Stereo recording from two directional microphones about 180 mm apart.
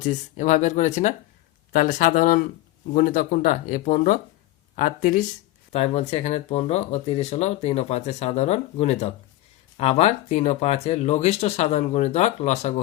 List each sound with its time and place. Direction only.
0.0 s speech: 45° left (ahead or behind)
5.7 s speech: 35° left (ahead or behind)